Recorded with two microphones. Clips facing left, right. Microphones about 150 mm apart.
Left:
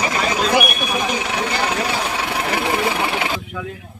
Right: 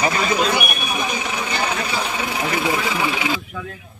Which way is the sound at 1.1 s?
75° left (ahead or behind).